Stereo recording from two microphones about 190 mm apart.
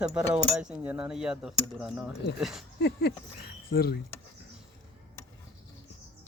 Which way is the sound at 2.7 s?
60° left (ahead or behind).